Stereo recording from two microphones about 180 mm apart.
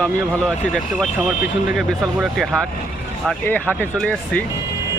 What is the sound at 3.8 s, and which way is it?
Speech, 10° left (ahead or behind).